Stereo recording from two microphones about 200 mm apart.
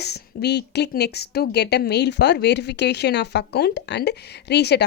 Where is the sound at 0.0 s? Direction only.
55° left (ahead or behind).